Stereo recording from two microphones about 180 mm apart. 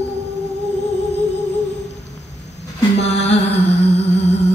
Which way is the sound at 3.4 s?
75° left (ahead or behind).